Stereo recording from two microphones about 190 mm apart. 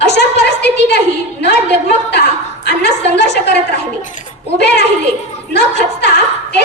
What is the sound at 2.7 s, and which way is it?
Speech, 60° left (ahead or behind).